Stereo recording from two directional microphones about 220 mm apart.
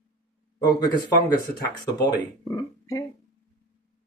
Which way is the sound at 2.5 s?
15° left (ahead or behind).